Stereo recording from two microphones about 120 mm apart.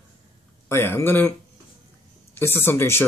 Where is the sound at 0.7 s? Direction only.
20° left (ahead or behind).